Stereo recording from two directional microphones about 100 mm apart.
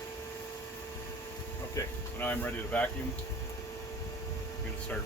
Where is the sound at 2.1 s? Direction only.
20° left (ahead or behind).